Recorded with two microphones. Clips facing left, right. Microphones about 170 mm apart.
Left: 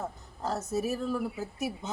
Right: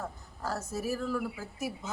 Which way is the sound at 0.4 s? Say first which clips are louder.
Left 3 dB; 25° left (ahead or behind).